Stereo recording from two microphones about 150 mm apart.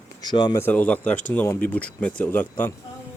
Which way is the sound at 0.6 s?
10° left (ahead or behind).